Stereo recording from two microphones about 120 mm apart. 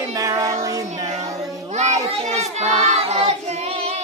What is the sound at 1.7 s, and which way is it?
Children playing, 75° right (ahead or behind).